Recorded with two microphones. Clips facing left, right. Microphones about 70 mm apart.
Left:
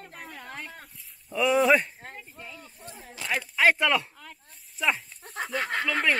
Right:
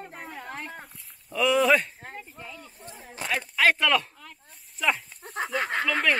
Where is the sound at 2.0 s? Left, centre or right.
Centre.